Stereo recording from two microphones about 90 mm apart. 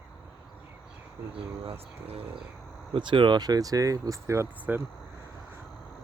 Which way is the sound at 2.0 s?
90° right.